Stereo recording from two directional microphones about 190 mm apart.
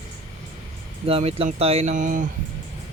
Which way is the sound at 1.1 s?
30° right (ahead or behind).